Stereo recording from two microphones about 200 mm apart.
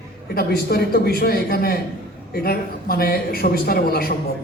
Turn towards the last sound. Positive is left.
turn(degrees=50)  # may be behind; listen again after turning